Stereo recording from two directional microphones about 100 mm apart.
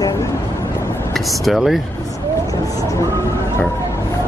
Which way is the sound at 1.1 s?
Centre (ahead or behind).